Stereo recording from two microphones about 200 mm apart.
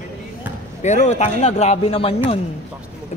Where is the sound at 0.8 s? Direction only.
35° left (ahead or behind).